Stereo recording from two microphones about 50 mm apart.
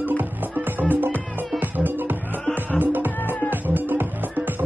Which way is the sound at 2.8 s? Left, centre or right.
Right.